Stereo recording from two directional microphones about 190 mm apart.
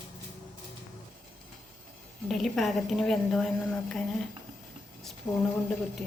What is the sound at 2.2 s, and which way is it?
A woman's voice, centre (ahead or behind).